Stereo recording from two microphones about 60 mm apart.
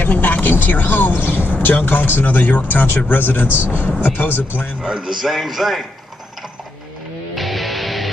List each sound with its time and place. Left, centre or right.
0.0 s speech: left
4.8 s a man's voice: centre
5.2 s speech: centre
7.3 s music: centre